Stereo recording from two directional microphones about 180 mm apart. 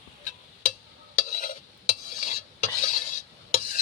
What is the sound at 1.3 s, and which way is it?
Stir, 45° left (ahead or behind).